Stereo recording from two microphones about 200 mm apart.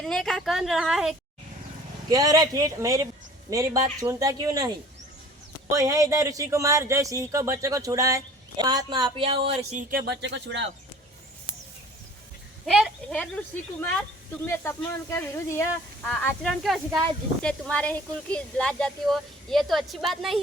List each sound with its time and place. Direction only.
0.0 s speech: 5° left (ahead or behind)
2.0 s speech: 20° right (ahead or behind)
9.9 s speech: 60° right (ahead or behind)
12.6 s speech: centre (ahead or behind)
14.4 s speech: 10° left (ahead or behind)